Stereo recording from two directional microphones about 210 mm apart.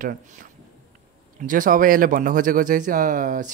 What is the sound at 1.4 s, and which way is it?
Speech, 40° right (ahead or behind).